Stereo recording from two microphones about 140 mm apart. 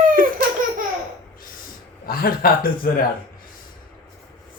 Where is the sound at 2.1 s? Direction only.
90° left.